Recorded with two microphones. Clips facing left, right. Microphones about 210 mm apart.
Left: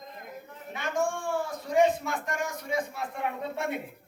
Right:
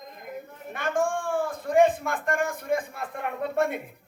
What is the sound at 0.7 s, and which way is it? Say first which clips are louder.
A man's voice: right 3 dB; 55° right (ahead or behind).